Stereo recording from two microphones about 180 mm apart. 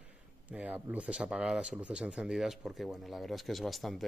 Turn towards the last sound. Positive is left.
turn(degrees=0)  # may be behind; listen again after turning